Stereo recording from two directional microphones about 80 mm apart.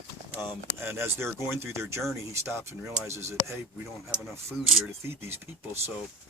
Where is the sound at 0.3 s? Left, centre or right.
Right.